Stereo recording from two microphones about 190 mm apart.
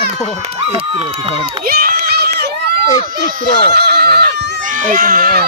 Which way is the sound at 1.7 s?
50° right (ahead or behind).